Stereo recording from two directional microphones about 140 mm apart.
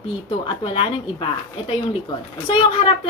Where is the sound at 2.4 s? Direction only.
40° left (ahead or behind).